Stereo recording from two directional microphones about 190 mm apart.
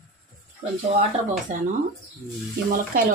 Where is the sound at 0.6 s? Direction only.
35° right (ahead or behind).